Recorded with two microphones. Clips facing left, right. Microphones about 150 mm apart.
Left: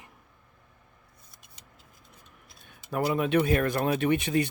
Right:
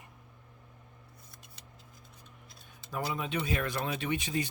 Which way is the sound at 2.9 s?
60° left (ahead or behind).